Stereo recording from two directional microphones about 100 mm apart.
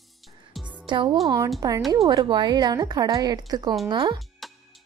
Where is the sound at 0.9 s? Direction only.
50° right (ahead or behind).